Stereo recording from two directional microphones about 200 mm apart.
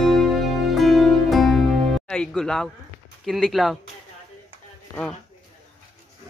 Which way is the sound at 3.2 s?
Centre (ahead or behind).